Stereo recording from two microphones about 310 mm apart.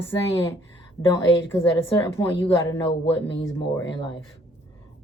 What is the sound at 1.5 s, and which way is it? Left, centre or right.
Speech, centre.